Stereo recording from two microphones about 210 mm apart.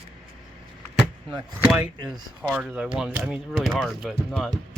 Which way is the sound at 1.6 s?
5° right (ahead or behind).